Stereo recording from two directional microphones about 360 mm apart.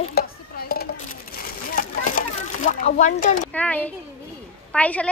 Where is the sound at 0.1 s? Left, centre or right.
Left.